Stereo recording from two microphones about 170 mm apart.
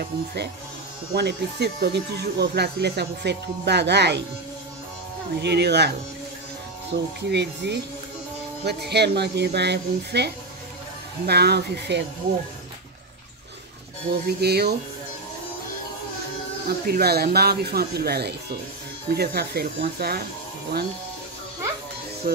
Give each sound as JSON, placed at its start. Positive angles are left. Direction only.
{"t": 0.0, "sound": "speech", "side_deg": -65}
{"t": 5.4, "sound": "speech", "side_deg": -80}
{"t": 14.2, "sound": "speech", "side_deg": -70}
{"t": 16.6, "sound": "speech", "side_deg": -70}
{"t": 22.2, "sound": "a sound", "side_deg": -60}